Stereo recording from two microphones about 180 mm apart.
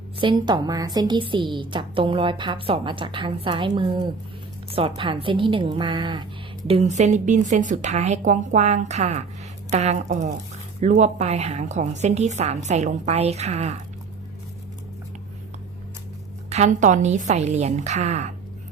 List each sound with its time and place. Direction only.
0.2 s a woman's voice: 25° right (ahead or behind)
6.7 s a woman's voice: 35° right (ahead or behind)
16.5 s a woman's voice: 40° right (ahead or behind)